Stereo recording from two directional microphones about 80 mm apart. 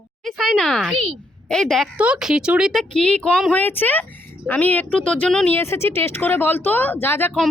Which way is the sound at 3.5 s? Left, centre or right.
Left.